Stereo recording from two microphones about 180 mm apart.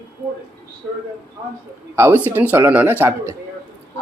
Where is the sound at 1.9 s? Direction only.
10° right (ahead or behind).